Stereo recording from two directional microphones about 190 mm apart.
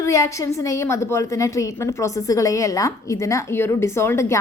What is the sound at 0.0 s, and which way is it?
A woman's voice, 15° left (ahead or behind).